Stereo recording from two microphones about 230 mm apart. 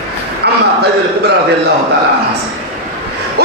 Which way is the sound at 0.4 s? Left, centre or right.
Right.